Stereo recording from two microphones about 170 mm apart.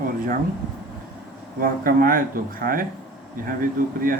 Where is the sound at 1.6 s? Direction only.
55° right (ahead or behind).